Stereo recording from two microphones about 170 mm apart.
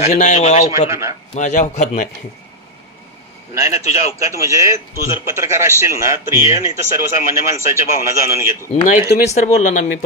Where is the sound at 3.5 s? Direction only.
20° right (ahead or behind).